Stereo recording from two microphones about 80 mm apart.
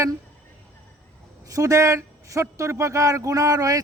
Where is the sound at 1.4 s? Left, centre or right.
Right.